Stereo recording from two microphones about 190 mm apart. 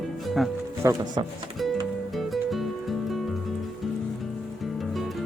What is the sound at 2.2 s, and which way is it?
Music, centre (ahead or behind).